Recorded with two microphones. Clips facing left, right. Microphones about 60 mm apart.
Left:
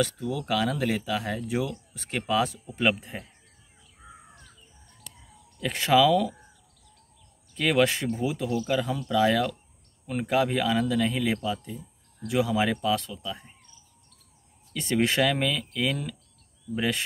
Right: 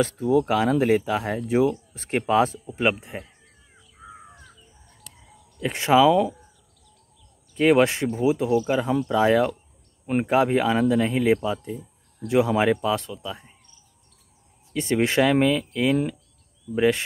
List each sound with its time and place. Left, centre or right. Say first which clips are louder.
0.0 s speech: right 8 dB; right
2.7 s speech: right 2 dB; right
5.6 s speech: right 3 dB; right
7.5 s speech: right 5 dB; right
14.7 s speech: right 3 dB; right